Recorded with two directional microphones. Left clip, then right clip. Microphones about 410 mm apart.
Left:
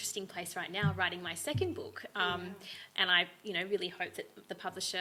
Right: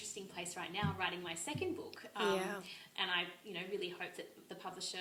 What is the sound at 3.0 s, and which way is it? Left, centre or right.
A woman's voice, left.